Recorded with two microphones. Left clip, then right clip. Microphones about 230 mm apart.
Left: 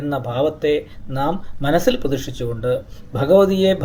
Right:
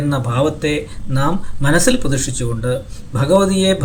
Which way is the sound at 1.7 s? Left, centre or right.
Centre.